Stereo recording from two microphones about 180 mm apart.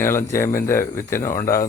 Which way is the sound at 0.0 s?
15° left (ahead or behind).